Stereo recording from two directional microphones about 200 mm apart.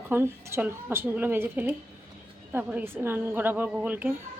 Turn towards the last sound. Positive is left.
turn(degrees=-5)  # may be behind; listen again after turning